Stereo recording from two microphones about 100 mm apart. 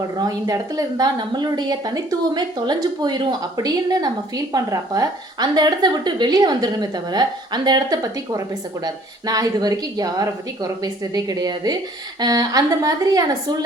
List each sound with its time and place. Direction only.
0.2 s a woman's voice: 40° right (ahead or behind)